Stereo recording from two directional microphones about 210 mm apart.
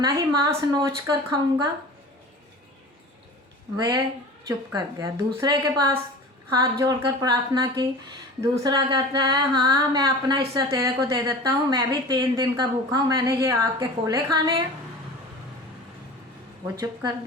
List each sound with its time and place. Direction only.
0.0 s a woman's voice: 20° right (ahead or behind)
3.8 s a woman's voice: 20° right (ahead or behind)